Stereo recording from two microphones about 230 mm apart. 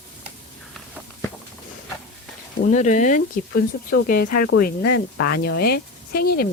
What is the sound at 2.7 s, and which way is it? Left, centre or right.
Speech, left.